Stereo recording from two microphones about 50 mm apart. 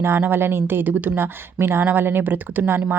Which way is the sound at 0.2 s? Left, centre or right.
Right.